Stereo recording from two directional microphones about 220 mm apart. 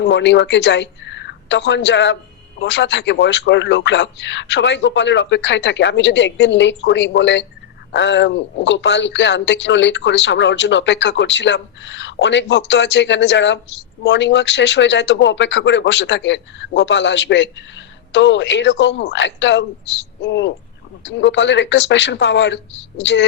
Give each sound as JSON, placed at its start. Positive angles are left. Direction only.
{"t": 0.0, "sound": "a woman's voice", "side_deg": 55}